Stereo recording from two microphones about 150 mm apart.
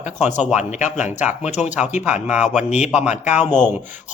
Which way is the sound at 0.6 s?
50° left (ahead or behind).